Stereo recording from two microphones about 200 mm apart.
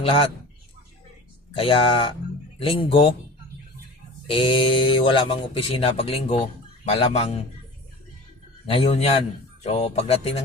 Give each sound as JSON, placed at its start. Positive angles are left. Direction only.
{"t": 1.5, "sound": "speech", "side_deg": 25}
{"t": 4.3, "sound": "speech", "side_deg": 25}
{"t": 8.6, "sound": "speech", "side_deg": 30}